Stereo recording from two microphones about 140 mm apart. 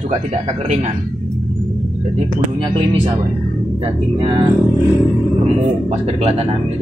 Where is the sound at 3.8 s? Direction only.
40° right (ahead or behind).